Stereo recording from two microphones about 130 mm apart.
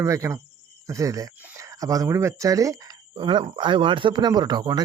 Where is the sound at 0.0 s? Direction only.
25° right (ahead or behind).